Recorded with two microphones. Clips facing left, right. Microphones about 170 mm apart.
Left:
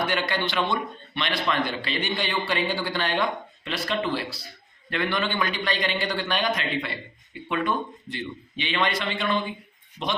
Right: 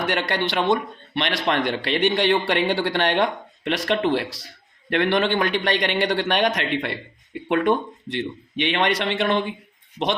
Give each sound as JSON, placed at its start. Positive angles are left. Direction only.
{"t": 0.1, "sound": "a man's voice", "side_deg": -65}
{"t": 8.5, "sound": "a man's voice", "side_deg": -70}
{"t": 9.3, "sound": "a man's voice", "side_deg": -70}